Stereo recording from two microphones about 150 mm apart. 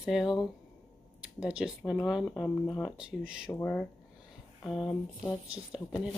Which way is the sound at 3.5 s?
10° left (ahead or behind).